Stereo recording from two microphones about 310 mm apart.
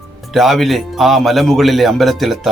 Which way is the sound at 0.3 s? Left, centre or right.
Centre.